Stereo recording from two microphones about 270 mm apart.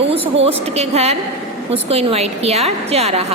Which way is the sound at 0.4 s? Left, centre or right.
Right.